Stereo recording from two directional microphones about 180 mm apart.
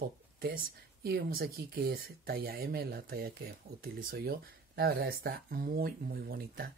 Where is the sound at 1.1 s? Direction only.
55° right (ahead or behind).